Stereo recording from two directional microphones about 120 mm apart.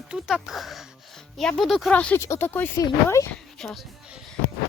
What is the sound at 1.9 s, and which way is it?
Speech, 10° left (ahead or behind).